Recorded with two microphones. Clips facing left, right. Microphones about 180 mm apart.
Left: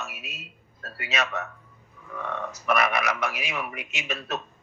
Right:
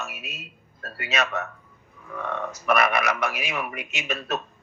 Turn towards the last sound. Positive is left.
turn(degrees=-55)  # may be behind; listen again after turning